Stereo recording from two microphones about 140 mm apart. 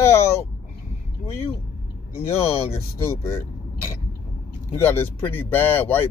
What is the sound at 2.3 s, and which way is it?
Speech, 45° left (ahead or behind).